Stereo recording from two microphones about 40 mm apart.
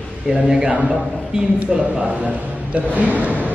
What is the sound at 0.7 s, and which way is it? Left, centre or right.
Speech, right.